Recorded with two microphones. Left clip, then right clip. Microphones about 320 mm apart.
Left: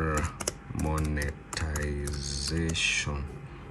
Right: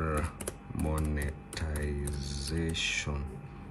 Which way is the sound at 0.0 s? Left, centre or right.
Centre.